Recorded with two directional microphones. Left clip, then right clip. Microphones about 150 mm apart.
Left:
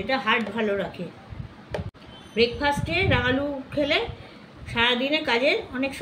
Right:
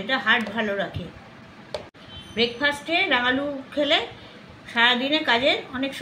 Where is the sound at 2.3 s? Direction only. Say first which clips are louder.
Left 1 dB; 60° left (ahead or behind).